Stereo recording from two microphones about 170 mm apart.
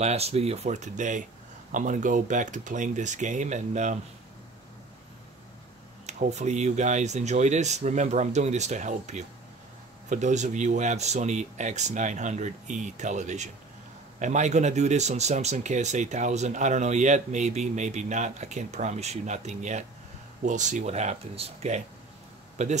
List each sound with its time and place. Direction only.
0.0 s speech: 40° right (ahead or behind)
6.0 s speech: 45° right (ahead or behind)